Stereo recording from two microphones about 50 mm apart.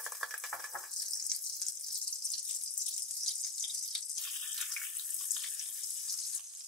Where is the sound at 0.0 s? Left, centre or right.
Centre.